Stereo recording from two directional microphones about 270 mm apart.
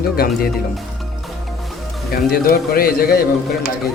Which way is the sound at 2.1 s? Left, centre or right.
Left.